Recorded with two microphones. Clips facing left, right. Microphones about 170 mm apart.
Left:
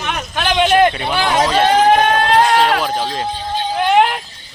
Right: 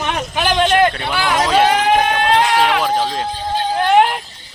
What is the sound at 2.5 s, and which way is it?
Speech, 45° left (ahead or behind).